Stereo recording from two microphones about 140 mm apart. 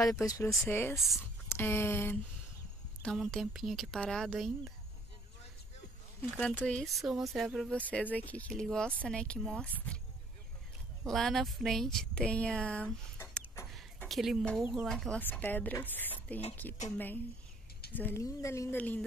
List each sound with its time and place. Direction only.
0.2 s speech: 25° left (ahead or behind)
0.7 s speech: 15° left (ahead or behind)
0.9 s speech: centre (ahead or behind)
1.5 s speech: 15° left (ahead or behind)
3.0 s speech: 5° left (ahead or behind)
6.3 s speech: 10° left (ahead or behind)
7.8 s speech: 10° left (ahead or behind)
11.1 s speech: 5° left (ahead or behind)
14.0 s speech: centre (ahead or behind)